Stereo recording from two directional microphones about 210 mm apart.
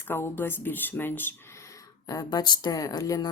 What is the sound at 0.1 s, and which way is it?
Speech, 10° left (ahead or behind).